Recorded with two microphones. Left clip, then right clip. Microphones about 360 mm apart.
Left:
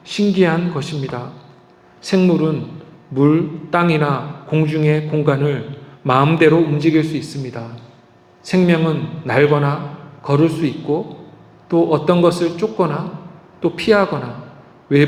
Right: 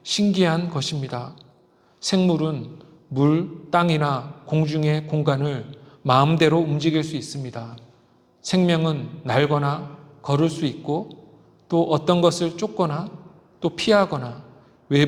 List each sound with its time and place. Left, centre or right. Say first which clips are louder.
0.0 s a man's voice: left 5 dB; right